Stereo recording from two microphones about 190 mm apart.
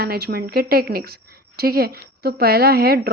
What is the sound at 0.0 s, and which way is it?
A woman's voice, 55° right (ahead or behind).